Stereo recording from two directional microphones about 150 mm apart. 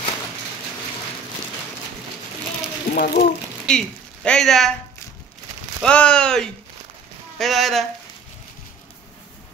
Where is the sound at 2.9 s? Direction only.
60° left (ahead or behind).